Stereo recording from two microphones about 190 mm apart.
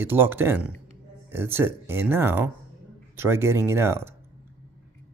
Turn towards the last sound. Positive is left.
turn(degrees=-15)  # may be behind; listen again after turning